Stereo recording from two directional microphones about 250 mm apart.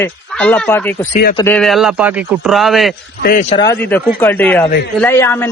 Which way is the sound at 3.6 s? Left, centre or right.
Centre.